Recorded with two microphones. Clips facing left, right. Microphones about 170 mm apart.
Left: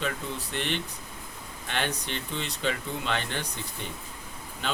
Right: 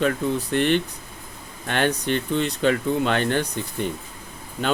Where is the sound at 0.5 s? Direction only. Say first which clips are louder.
Right 11 dB; 50° right (ahead or behind).